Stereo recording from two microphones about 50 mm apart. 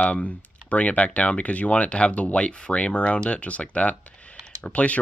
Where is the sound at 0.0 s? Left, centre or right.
Left.